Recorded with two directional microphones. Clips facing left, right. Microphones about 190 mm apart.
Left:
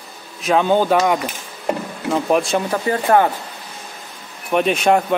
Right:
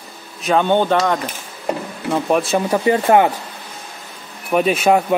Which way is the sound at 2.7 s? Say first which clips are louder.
Right 3 dB; 15° right (ahead or behind).